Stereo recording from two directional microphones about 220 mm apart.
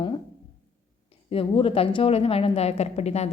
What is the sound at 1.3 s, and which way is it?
A woman's voice, 25° left (ahead or behind).